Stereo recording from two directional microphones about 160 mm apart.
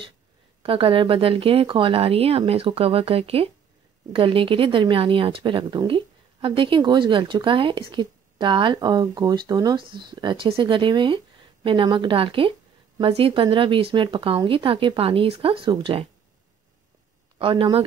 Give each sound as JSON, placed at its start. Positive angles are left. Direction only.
{"t": 0.6, "sound": "speech", "side_deg": -35}
{"t": 17.4, "sound": "speech", "side_deg": -35}